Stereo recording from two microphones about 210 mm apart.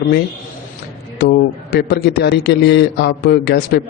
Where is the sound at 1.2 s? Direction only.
50° left (ahead or behind).